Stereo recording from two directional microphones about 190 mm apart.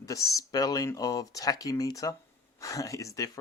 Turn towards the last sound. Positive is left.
turn(degrees=15)  # may be behind; listen again after turning